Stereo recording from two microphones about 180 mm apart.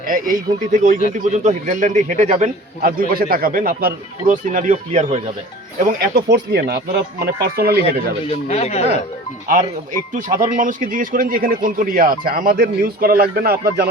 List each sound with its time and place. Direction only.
0.0 s a man's voice: 50° right (ahead or behind)
2.8 s a man's voice: 55° right (ahead or behind); by 5.3 s 40° right (ahead or behind)
5.8 s speech: 60° right (ahead or behind)
8.3 s speech: 35° left (ahead or behind)
9.5 s a man's voice: 50° right (ahead or behind)